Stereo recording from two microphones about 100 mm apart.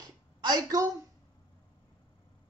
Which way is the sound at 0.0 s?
40° right (ahead or behind).